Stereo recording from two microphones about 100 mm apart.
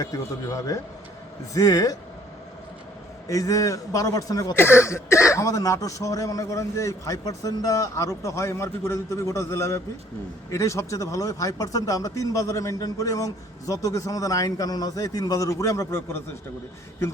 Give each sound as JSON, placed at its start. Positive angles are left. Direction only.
{"t": 0.0, "sound": "speech", "side_deg": 35}
{"t": 3.2, "sound": "speech", "side_deg": 35}
{"t": 4.5, "sound": "speech", "side_deg": 25}